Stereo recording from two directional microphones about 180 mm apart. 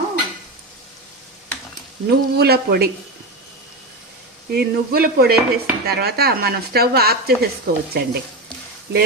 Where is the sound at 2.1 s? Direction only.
60° right (ahead or behind).